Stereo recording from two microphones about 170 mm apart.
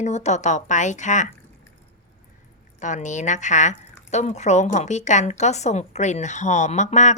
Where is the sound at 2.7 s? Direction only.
45° left (ahead or behind).